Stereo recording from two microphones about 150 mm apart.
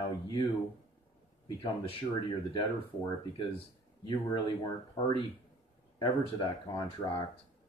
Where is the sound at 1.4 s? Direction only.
35° left (ahead or behind).